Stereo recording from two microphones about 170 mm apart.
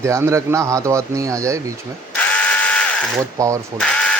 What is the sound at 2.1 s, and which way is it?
Ratchet, 10° left (ahead or behind).